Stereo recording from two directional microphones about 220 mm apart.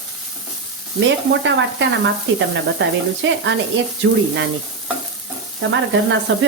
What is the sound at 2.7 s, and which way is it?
Speech, 55° right (ahead or behind).